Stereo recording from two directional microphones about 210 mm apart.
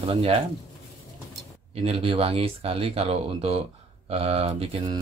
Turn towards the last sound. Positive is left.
turn(degrees=-25)  # may be behind; listen again after turning